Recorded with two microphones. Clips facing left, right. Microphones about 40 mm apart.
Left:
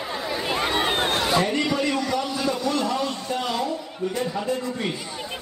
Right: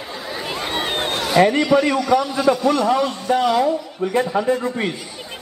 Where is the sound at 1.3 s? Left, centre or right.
Right.